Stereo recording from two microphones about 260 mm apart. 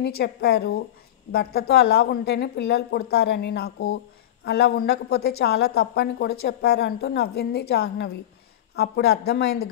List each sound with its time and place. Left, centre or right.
0.0 s a woman's voice: left